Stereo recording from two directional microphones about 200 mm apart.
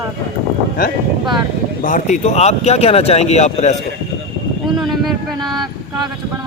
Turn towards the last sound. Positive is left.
turn(degrees=0)  # may be behind; listen again after turning